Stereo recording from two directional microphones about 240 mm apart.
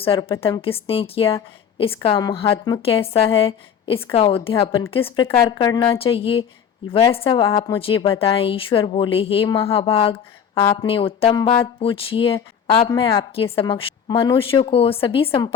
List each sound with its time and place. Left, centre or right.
0.0 s a woman's voice: left